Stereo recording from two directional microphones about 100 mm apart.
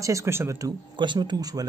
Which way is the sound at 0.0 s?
30° right (ahead or behind).